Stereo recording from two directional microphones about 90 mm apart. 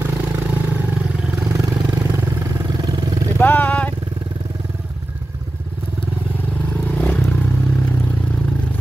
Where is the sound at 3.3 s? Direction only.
20° left (ahead or behind).